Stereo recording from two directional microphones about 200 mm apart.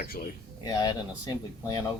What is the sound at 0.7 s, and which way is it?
Speech, 20° left (ahead or behind).